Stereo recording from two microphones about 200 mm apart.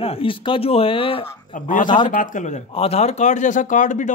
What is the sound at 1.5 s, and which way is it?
Speech, 40° left (ahead or behind).